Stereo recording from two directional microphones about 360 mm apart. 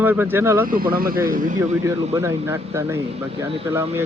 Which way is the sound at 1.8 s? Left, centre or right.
Centre.